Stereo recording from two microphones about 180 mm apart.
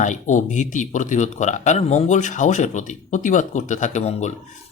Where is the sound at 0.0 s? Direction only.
45° left (ahead or behind).